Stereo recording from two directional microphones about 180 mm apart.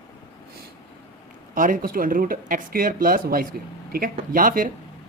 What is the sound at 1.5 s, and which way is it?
Speech, 50° right (ahead or behind).